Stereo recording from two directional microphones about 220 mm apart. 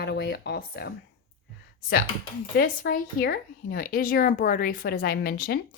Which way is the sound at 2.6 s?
40° left (ahead or behind).